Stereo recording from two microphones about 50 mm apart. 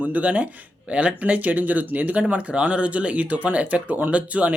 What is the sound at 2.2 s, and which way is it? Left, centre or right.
Speech, right.